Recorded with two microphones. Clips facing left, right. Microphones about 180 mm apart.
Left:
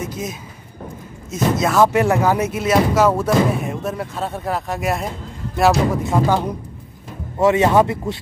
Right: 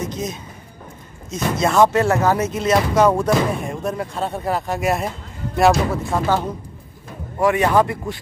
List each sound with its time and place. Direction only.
0.0 s speech: 5° left (ahead or behind)
1.6 s artillery fire: centre (ahead or behind)
1.9 s artillery fire: 15° left (ahead or behind)
6.0 s speech: 10° left (ahead or behind)
7.3 s speech: 25° left (ahead or behind)